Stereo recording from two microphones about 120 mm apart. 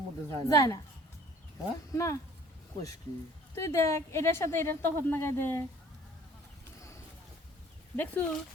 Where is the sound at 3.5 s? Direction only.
25° left (ahead or behind).